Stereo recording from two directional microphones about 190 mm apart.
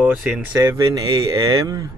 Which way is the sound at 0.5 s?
20° right (ahead or behind).